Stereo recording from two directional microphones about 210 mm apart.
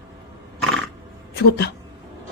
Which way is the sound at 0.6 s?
Centre (ahead or behind).